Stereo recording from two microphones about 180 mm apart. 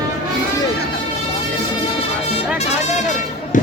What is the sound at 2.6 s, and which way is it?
Music, 40° left (ahead or behind).